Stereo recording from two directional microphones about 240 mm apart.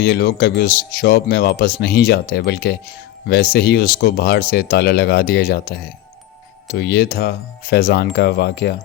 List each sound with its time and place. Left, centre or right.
0.0 s speech: left